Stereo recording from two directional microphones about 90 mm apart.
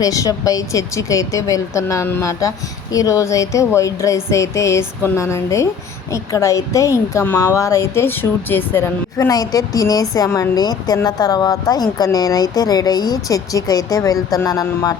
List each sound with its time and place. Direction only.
0.0 s speech: 40° left (ahead or behind); by 8.9 s 25° left (ahead or behind)
9.1 s speech: 45° left (ahead or behind)